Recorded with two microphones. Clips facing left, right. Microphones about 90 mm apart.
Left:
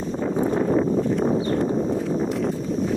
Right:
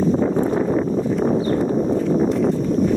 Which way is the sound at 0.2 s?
55° right (ahead or behind).